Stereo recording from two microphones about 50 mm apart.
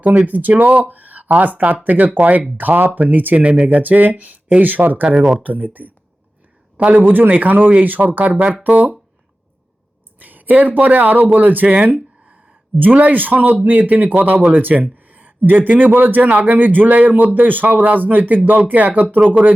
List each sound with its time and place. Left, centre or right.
0.3 s a man's voice: right
10.2 s a man's voice: right